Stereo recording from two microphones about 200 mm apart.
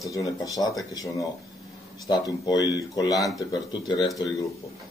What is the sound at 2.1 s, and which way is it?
Speech, 20° left (ahead or behind).